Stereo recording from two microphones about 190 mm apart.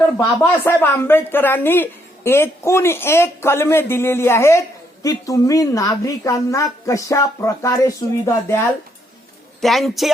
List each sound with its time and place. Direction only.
0.2 s a man's voice: 10° left (ahead or behind)
9.6 s a man's voice: centre (ahead or behind)